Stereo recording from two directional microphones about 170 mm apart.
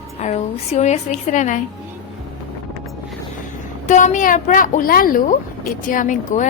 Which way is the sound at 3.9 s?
45° left (ahead or behind).